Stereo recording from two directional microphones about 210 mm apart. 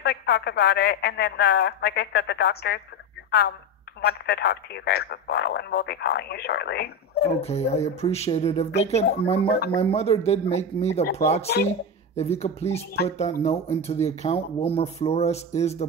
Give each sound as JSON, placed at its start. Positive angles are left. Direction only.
{"t": 0.0, "sound": "a man's voice", "side_deg": 50}
{"t": 7.3, "sound": "speech", "side_deg": 30}